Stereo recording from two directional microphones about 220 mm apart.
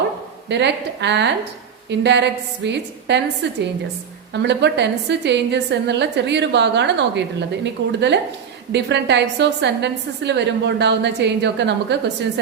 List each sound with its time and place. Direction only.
0.4 s a woman's voice: 50° right (ahead or behind)
4.4 s a woman's voice: 50° right (ahead or behind)